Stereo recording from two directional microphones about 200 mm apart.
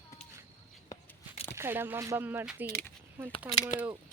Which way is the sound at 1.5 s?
10° right (ahead or behind).